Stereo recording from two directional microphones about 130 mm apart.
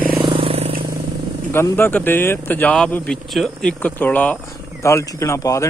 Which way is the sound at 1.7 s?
15° left (ahead or behind).